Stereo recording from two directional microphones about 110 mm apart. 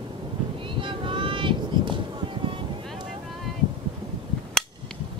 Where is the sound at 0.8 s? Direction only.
50° right (ahead or behind).